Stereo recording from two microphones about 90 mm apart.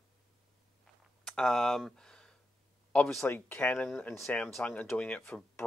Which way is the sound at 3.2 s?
25° left (ahead or behind).